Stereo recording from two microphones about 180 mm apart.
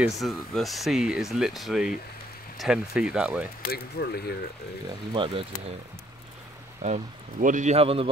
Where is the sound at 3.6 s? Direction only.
60° left (ahead or behind).